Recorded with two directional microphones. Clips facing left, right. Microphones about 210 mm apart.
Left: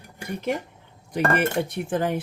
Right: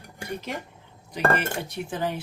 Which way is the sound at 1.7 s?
55° left (ahead or behind).